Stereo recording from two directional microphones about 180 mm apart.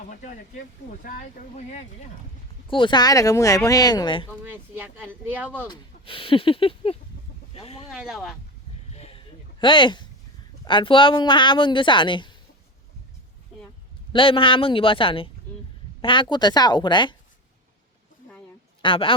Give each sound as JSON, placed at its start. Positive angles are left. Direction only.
{"t": 0.1, "sound": "speech", "side_deg": 45}
{"t": 2.6, "sound": "speech", "side_deg": 25}
{"t": 4.5, "sound": "speech", "side_deg": -10}
{"t": 5.6, "sound": "speech", "side_deg": 25}
{"t": 7.9, "sound": "speech", "side_deg": 0}
{"t": 8.9, "sound": "a sound", "side_deg": 35}
{"t": 10.7, "sound": "speech", "side_deg": 25}
{"t": 14.1, "sound": "speech", "side_deg": 30}
{"t": 18.8, "sound": "a woman's voice", "side_deg": 30}